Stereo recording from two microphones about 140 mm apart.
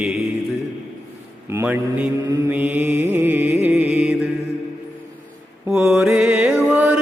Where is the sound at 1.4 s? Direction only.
15° right (ahead or behind).